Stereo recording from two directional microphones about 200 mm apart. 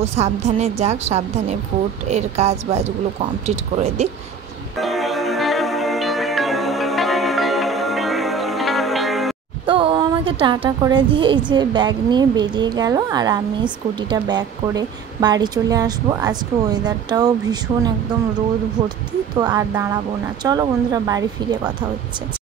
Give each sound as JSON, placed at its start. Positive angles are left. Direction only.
{"t": 0.1, "sound": "a woman's voice", "side_deg": -35}
{"t": 4.7, "sound": "music", "side_deg": 0}
{"t": 9.7, "sound": "speech", "side_deg": -25}
{"t": 19.3, "sound": "speech", "side_deg": -20}